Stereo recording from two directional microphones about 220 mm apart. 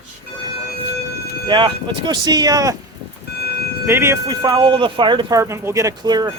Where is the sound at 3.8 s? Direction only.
10° right (ahead or behind).